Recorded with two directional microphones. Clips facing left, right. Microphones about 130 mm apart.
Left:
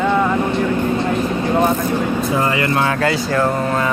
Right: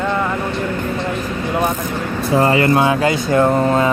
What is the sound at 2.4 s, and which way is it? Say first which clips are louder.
Speech: right 8 dB; 30° right (ahead or behind).